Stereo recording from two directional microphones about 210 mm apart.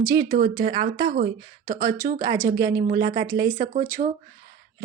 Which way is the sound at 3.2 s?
15° right (ahead or behind).